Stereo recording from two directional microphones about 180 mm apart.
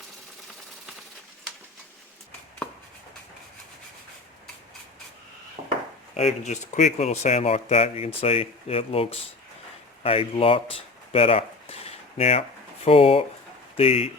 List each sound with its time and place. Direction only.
5.6 s wood: 60° right (ahead or behind)
6.1 s speech: 35° left (ahead or behind)
10.0 s a sound: 30° left (ahead or behind)
13.7 s speech: 30° left (ahead or behind)